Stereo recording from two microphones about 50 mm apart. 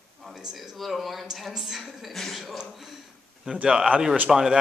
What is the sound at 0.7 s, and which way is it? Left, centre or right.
A woman's voice, centre.